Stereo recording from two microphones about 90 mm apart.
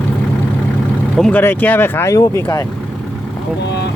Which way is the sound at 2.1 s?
35° left (ahead or behind).